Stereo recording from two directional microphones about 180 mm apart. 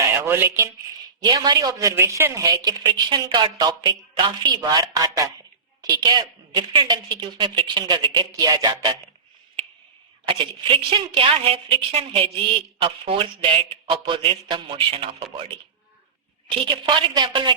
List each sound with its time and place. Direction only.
0.2 s a woman's voice: 15° right (ahead or behind)
10.2 s a woman's voice: 30° right (ahead or behind)
16.6 s a woman's voice: 30° right (ahead or behind)